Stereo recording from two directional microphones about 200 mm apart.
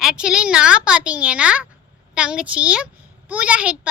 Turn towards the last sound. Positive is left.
turn(degrees=-5)  # may be behind; listen again after turning